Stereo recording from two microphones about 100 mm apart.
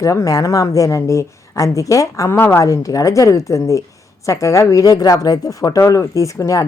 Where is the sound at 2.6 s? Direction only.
35° left (ahead or behind).